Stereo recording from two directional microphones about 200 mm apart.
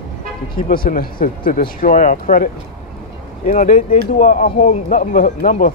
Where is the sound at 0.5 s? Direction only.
45° left (ahead or behind).